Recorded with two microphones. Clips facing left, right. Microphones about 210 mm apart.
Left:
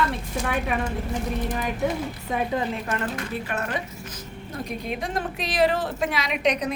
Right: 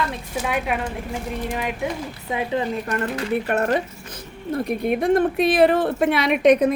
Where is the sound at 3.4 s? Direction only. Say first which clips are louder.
Right 8 dB; 60° right (ahead or behind).